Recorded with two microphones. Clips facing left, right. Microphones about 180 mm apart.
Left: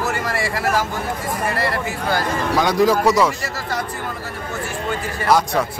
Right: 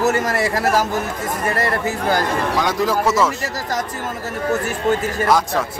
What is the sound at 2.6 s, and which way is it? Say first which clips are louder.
Speech: left 5 dB; centre (ahead or behind).